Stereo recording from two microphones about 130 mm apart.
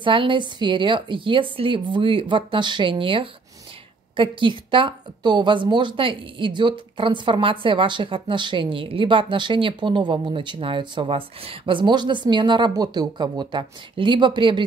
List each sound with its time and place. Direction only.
0.0 s speech: 40° right (ahead or behind)